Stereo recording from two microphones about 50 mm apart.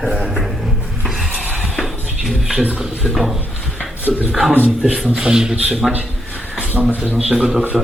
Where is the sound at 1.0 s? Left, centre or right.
Centre.